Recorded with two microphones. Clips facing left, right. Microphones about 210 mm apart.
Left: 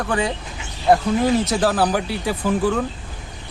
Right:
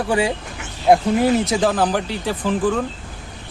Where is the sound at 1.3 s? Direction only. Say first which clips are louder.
Right 1 dB; centre (ahead or behind).